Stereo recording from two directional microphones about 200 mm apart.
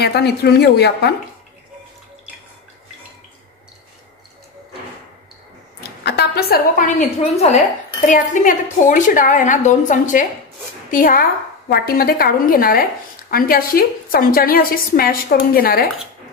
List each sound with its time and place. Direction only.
0.0 s a woman's voice: 55° left (ahead or behind)
6.0 s a sound: 55° left (ahead or behind)
7.0 s a woman's voice: 30° left (ahead or behind); by 15.9 s 50° left (ahead or behind)